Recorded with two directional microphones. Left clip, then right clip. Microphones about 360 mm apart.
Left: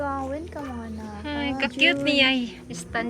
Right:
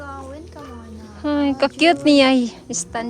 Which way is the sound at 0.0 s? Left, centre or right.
Centre.